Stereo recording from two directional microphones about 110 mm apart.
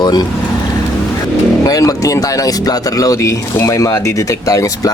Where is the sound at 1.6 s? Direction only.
35° left (ahead or behind).